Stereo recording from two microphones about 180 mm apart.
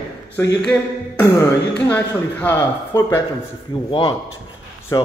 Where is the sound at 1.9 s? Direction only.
10° left (ahead or behind).